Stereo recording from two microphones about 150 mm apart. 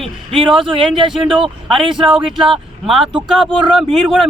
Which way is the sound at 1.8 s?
30° right (ahead or behind).